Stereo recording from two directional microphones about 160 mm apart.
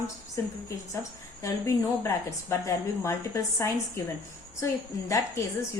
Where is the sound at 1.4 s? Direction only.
20° left (ahead or behind).